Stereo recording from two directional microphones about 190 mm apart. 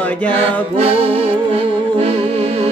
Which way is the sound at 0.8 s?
30° right (ahead or behind).